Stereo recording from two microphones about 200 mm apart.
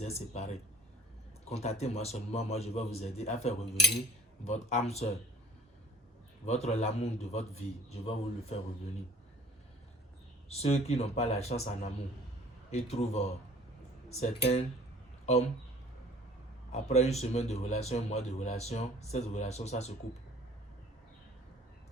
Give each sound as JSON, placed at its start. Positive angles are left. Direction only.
{"t": 0.0, "sound": "a man's voice", "side_deg": 35}
{"t": 6.4, "sound": "a man's voice", "side_deg": 35}
{"t": 10.5, "sound": "a man's voice", "side_deg": 30}
{"t": 12.9, "sound": "a man's voice", "side_deg": 35}
{"t": 16.7, "sound": "a man's voice", "side_deg": 35}